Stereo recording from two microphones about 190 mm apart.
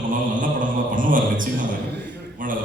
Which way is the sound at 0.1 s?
45° right (ahead or behind).